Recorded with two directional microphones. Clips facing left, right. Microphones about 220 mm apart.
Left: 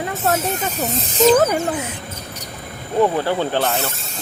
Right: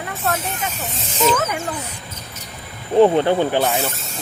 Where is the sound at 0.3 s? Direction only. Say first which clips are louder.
Left 3 dB; 40° left (ahead or behind).